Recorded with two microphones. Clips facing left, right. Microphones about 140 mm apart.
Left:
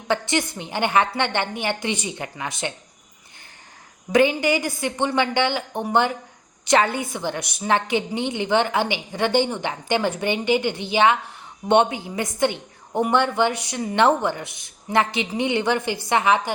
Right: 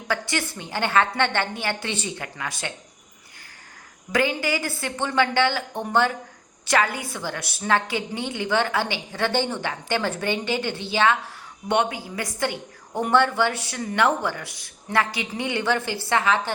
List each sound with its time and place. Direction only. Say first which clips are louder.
0.1 s a woman's voice: left 4 dB; 20° left (ahead or behind)
4.1 s a woman's voice: left 5 dB; 20° left (ahead or behind)